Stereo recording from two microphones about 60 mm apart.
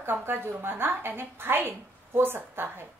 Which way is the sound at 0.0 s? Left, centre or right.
Right.